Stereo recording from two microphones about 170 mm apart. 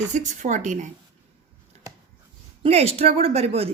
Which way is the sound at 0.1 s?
45° right (ahead or behind).